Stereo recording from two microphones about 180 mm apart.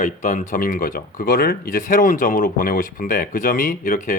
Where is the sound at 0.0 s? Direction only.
45° left (ahead or behind).